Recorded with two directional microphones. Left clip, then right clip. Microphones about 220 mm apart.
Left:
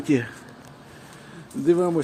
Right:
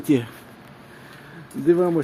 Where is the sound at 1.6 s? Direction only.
5° right (ahead or behind).